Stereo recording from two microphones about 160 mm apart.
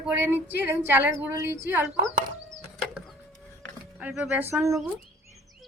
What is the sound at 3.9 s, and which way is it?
Speech, 10° right (ahead or behind).